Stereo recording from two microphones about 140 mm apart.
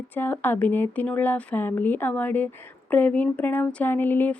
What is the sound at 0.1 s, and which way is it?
Speech, 15° left (ahead or behind).